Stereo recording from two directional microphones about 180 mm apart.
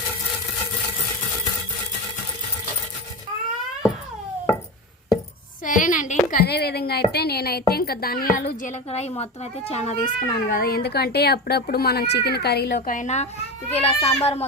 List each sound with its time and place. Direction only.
5.6 s a sound: 45° left (ahead or behind)
6.4 s speech: 60° left (ahead or behind)
8.4 s a child's voice: 35° left (ahead or behind)
10.2 s speech: 60° left (ahead or behind)
12.9 s a child's voice: 40° left (ahead or behind)